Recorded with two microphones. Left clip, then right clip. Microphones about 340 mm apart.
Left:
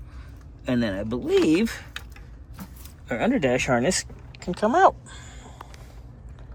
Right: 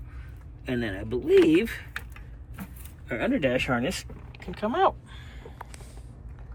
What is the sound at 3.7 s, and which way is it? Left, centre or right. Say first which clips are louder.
Speech: left 6 dB; centre.